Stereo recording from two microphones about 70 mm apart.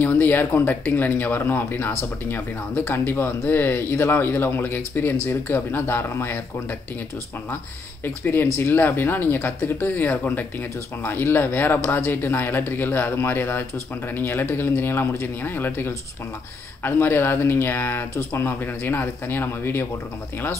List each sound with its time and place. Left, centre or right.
0.0 s speech: left
8.0 s speech: left